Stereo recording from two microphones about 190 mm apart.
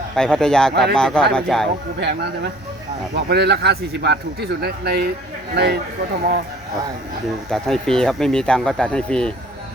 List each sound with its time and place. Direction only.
0.2 s speech: 5° left (ahead or behind)
0.7 s speech: 60° right (ahead or behind)
0.9 s speech: 5° left (ahead or behind)
3.2 s speech: 60° right (ahead or behind)
7.5 s speech: centre (ahead or behind)